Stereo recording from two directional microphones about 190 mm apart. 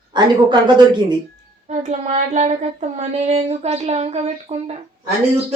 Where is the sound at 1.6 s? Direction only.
40° right (ahead or behind).